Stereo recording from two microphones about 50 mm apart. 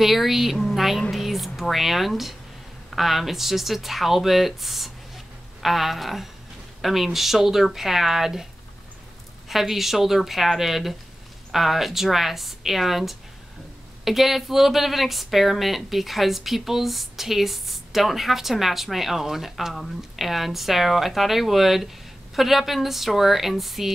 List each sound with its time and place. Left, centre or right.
0.0 s speech: centre
0.6 s a sound: centre
1.1 s speech: centre
9.5 s speech: centre